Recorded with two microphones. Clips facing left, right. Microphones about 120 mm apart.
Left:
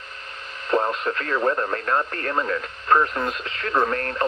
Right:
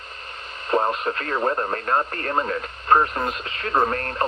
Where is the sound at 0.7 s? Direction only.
25° right (ahead or behind).